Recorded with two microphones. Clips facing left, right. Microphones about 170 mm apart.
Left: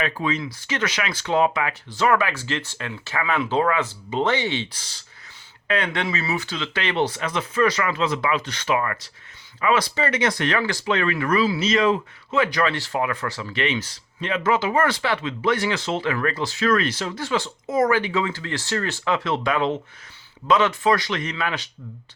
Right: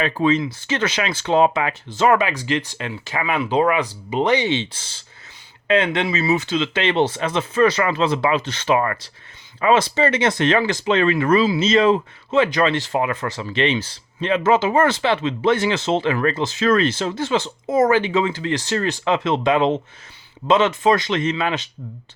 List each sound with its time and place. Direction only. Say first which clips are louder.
0.0 s speech: right 6 dB; 30° right (ahead or behind)